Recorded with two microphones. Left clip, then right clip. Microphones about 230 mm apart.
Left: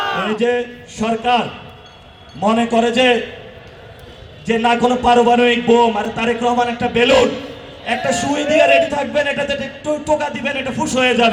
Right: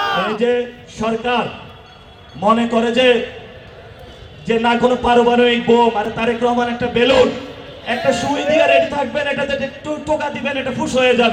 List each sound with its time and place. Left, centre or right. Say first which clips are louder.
0.3 s a man's voice: even; left
4.4 s a man's voice: even; left